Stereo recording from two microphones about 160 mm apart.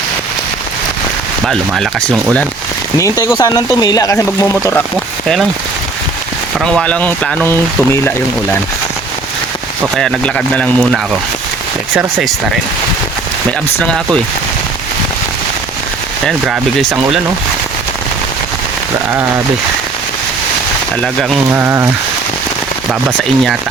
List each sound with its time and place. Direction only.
1.5 s speech: centre (ahead or behind)
3.3 s speech: 25° left (ahead or behind)
6.6 s speech: 5° left (ahead or behind)
10.0 s speech: 5° left (ahead or behind)
13.7 s speech: 5° left (ahead or behind)
16.2 s speech: centre (ahead or behind)
21.0 s speech: 5° left (ahead or behind)
21.5 s speech: 15° right (ahead or behind)